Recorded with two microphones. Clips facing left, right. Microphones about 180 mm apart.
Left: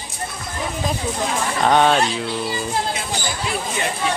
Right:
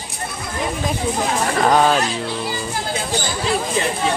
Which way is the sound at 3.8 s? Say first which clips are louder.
Right 2 dB; 35° right (ahead or behind).